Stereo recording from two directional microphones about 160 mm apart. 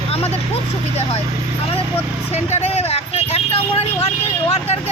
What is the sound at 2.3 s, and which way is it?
Speech, 40° left (ahead or behind).